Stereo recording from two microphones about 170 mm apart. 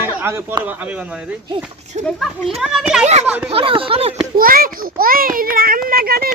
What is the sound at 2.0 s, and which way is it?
Speech, 40° right (ahead or behind).